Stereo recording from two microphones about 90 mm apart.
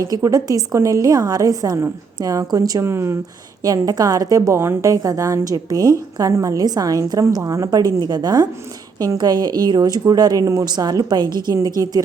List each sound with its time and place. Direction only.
0.0 s a woman's voice: 35° right (ahead or behind)
2.9 s speech: 30° right (ahead or behind)
3.6 s a woman's voice: 45° right (ahead or behind)
11.6 s a woman's voice: 40° right (ahead or behind)